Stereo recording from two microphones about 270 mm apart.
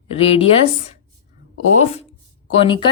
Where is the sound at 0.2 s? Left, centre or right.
Left.